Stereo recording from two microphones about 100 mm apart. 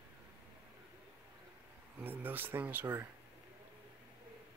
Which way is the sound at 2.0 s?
20° right (ahead or behind).